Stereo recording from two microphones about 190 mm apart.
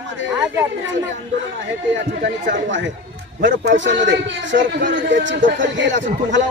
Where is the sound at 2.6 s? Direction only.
75° right (ahead or behind).